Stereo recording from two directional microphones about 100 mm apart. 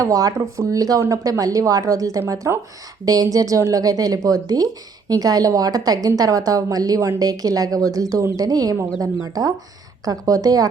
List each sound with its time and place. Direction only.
0.0 s a woman's voice: 35° right (ahead or behind)